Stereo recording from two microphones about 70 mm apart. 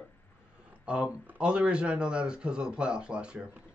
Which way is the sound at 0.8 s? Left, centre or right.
Centre.